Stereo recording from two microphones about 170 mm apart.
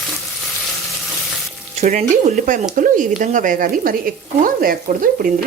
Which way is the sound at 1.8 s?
45° right (ahead or behind).